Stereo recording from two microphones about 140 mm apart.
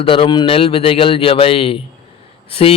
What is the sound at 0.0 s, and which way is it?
A man's voice, 40° left (ahead or behind).